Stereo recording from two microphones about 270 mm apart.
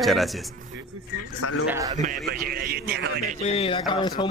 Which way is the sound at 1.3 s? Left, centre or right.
Left.